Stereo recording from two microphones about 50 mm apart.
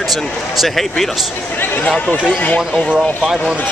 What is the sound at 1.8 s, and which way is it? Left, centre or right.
Speech, left.